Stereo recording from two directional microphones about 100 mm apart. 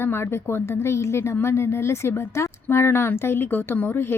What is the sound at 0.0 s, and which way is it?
Speech, 25° left (ahead or behind).